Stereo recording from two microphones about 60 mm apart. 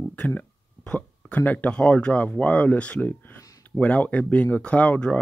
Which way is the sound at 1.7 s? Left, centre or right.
Centre.